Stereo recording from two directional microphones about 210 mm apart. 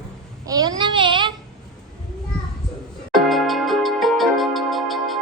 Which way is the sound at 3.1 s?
Centre (ahead or behind).